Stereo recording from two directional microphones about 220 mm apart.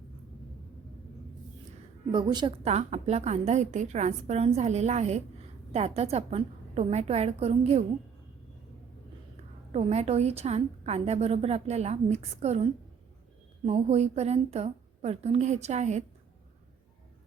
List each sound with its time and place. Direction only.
2.1 s a woman's voice: 20° right (ahead or behind)
9.7 s a woman's voice: 30° right (ahead or behind)
13.7 s a woman's voice: 30° right (ahead or behind)